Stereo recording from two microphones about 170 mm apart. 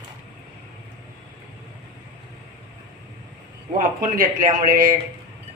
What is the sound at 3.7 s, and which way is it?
Speech, 55° right (ahead or behind).